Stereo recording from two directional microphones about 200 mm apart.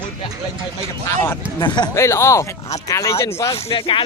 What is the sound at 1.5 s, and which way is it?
Speech, 20° left (ahead or behind).